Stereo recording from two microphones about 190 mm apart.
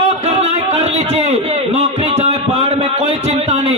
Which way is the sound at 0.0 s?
35° right (ahead or behind).